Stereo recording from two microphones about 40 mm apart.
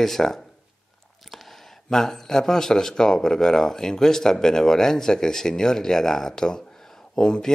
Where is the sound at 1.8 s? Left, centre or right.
Centre.